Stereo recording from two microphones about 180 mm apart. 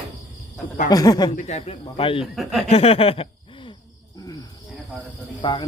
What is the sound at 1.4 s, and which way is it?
Speech, 40° left (ahead or behind).